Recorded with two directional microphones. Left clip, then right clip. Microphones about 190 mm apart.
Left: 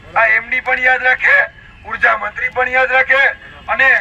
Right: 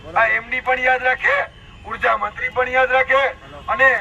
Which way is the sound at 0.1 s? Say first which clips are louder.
Left 5 dB; 10° left (ahead or behind).